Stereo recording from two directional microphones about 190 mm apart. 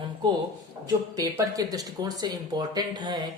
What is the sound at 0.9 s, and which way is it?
Speech, 20° right (ahead or behind).